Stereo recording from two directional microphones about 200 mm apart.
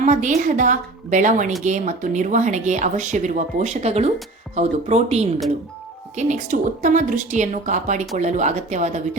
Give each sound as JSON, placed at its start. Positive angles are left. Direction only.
{"t": 0.0, "sound": "a woman's voice", "side_deg": -40}